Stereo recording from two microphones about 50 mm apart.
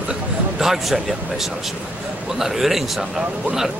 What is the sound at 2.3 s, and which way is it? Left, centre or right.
Speech, centre.